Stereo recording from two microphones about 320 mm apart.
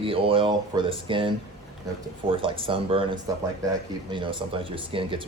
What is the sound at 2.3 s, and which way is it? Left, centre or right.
Speech, centre.